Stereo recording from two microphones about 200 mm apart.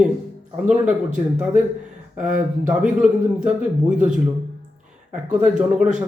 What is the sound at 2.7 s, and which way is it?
Speech, 5° right (ahead or behind).